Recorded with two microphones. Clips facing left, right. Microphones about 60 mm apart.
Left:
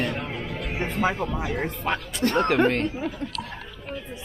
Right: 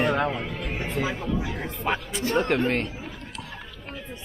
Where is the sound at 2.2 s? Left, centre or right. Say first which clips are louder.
Left 3 dB; left.